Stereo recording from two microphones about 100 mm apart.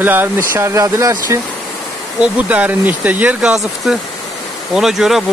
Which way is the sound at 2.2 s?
15° right (ahead or behind).